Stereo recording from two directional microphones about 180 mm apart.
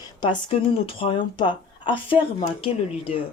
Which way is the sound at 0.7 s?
30° left (ahead or behind).